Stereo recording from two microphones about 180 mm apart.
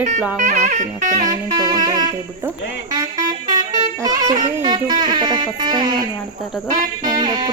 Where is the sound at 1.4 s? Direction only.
20° right (ahead or behind).